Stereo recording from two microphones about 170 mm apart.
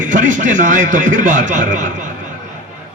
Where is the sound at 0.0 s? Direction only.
50° right (ahead or behind).